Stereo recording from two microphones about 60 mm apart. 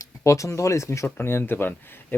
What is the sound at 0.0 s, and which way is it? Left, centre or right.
Speech, left.